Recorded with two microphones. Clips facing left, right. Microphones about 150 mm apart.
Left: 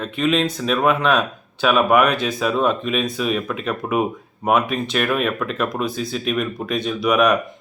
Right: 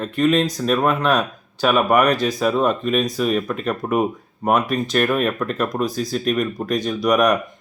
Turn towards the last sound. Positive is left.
turn(degrees=0)  # may be behind; listen again after turning